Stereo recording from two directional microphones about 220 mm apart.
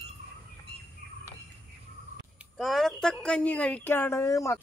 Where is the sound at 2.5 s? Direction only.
Centre (ahead or behind).